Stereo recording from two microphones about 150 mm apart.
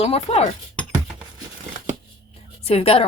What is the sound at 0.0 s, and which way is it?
Speech, 45° left (ahead or behind).